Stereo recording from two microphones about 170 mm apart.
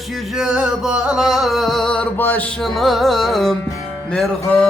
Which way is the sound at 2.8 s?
Centre (ahead or behind).